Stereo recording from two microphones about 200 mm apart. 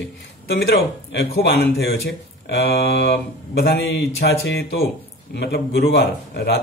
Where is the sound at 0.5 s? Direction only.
55° left (ahead or behind).